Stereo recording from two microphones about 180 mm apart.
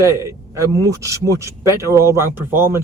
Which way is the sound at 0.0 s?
15° right (ahead or behind).